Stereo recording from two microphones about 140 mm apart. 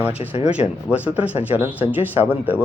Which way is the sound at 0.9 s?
10° right (ahead or behind).